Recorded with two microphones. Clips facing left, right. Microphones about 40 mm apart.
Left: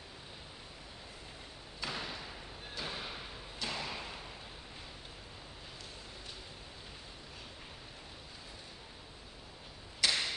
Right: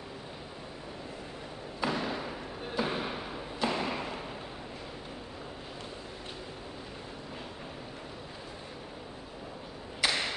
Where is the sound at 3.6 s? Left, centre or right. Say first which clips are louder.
Right 8 dB; right.